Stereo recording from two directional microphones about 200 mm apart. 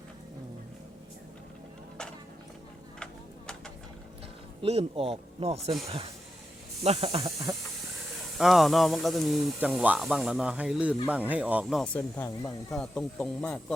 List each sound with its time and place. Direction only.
4.6 s speech: 30° right (ahead or behind)
6.8 s speech: 30° right (ahead or behind)
8.4 s speech: centre (ahead or behind)
12.1 s speech: 15° left (ahead or behind)
12.7 s speech: 5° left (ahead or behind)